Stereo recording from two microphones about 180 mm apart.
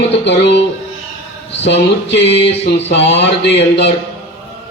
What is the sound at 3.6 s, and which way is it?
Speech, 75° left (ahead or behind).